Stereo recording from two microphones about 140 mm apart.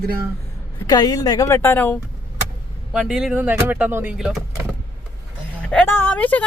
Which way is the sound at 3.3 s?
15° right (ahead or behind).